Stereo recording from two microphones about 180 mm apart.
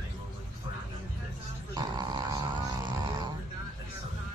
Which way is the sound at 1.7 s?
25° right (ahead or behind).